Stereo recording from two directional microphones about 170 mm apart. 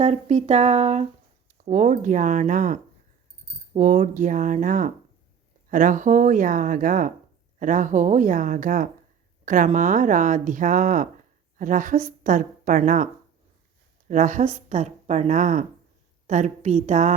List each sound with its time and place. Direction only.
0.0 s a woman's voice: 40° right (ahead or behind)
14.1 s speech: 50° right (ahead or behind)